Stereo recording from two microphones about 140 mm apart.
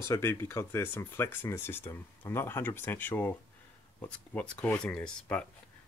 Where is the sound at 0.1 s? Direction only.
20° left (ahead or behind).